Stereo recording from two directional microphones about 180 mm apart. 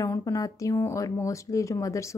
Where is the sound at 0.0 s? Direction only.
20° left (ahead or behind).